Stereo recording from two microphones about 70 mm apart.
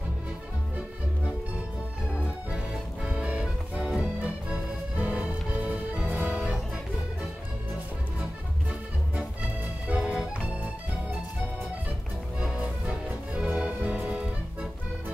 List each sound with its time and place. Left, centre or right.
3.1 s music: centre
9.8 s organ: centre
12.4 s music: centre